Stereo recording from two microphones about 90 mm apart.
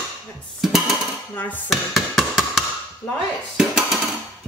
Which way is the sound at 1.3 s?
20° left (ahead or behind).